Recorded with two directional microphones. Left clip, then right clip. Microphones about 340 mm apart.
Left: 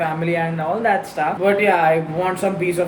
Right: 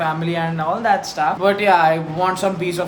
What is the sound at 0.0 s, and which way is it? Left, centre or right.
Speech, centre.